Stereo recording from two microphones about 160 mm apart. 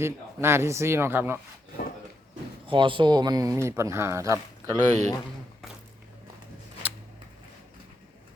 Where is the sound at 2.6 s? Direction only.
30° right (ahead or behind).